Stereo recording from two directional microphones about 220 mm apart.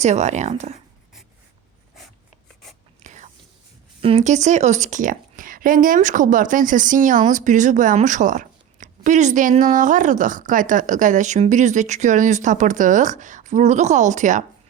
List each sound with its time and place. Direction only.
0.0 s speech: 30° right (ahead or behind)
3.0 s whispering: 35° right (ahead or behind)
4.0 s speech: 30° right (ahead or behind)